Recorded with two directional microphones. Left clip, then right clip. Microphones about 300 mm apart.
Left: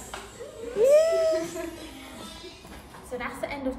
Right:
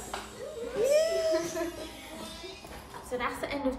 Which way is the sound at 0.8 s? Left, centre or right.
Centre.